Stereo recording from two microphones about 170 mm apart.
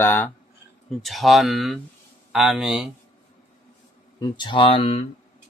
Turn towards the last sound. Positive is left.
turn(degrees=35)  # may be behind; listen again after turning